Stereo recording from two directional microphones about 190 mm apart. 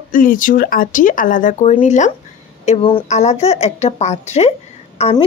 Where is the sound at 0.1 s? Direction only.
45° left (ahead or behind).